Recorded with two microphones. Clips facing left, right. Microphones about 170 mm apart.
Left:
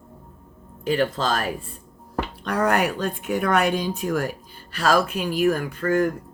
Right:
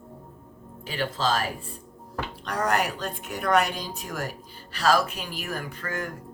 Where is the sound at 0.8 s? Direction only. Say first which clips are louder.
Left 5 dB; 50° left (ahead or behind).